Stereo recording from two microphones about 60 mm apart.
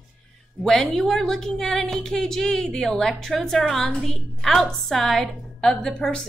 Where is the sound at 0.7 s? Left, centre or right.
Centre.